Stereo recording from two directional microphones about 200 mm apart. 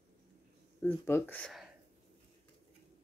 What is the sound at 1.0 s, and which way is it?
Speech, 10° left (ahead or behind).